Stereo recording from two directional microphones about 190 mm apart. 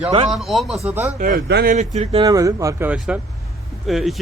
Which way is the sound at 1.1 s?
45° right (ahead or behind).